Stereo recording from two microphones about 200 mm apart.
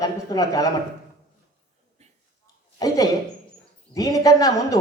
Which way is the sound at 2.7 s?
20° left (ahead or behind).